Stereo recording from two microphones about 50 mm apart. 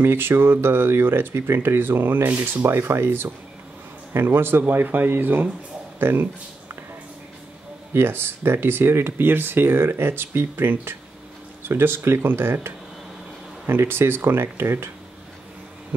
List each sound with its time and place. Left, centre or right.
0.0 s speech: right
2.6 s speech: right
7.9 s speech: right
15.9 s speech: right